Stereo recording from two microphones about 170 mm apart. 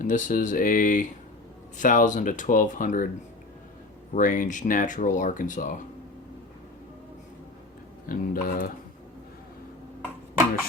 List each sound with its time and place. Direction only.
0.0 s speech: 50° left (ahead or behind)
4.1 s speech: 50° left (ahead or behind)
8.0 s dog: 55° left (ahead or behind)